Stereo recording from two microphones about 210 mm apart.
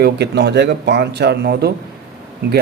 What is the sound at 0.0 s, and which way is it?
A man's voice, 50° right (ahead or behind).